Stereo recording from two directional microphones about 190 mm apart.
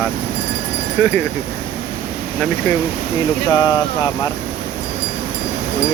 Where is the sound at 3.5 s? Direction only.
20° left (ahead or behind).